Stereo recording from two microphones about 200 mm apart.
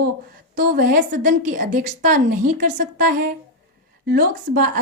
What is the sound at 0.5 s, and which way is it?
A woman's voice, 45° right (ahead or behind).